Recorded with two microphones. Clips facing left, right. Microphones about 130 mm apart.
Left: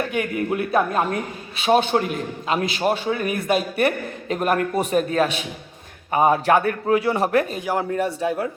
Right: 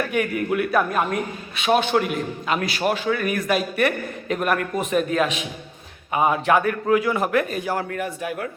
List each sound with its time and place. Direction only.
0.0 s a man's voice: 25° left (ahead or behind)
7.6 s a man's voice: 15° left (ahead or behind)
8.0 s a man's voice: 30° left (ahead or behind)